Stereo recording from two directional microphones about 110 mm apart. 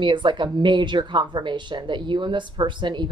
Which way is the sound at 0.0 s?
45° right (ahead or behind).